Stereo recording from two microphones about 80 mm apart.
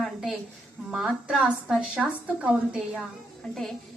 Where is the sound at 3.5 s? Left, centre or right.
Centre.